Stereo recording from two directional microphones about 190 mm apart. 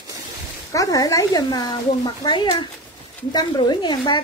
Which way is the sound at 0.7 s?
20° left (ahead or behind).